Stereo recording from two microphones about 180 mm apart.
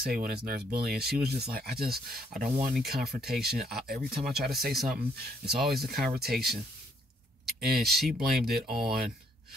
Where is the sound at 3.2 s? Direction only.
60° right (ahead or behind).